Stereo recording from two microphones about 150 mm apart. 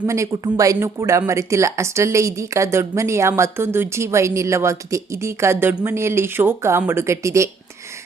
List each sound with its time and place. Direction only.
0.0 s a woman's voice: 20° right (ahead or behind)